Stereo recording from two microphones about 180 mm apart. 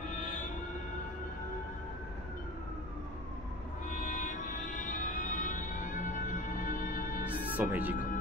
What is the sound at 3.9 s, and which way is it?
Music, 45° left (ahead or behind).